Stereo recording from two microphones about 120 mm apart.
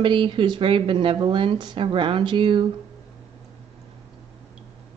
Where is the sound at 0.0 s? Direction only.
45° right (ahead or behind).